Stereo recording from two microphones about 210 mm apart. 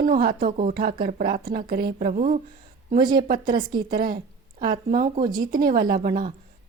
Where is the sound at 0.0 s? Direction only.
40° right (ahead or behind).